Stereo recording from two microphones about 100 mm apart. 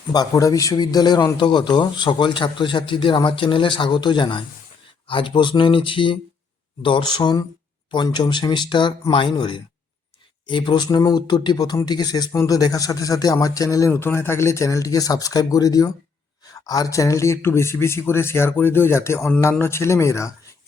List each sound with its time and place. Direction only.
0.1 s speech: 40° left (ahead or behind)
13.9 s speech: 25° left (ahead or behind)